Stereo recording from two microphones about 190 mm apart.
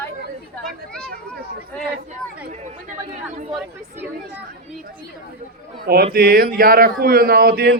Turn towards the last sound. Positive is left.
turn(degrees=-55)  # may be behind; listen again after turning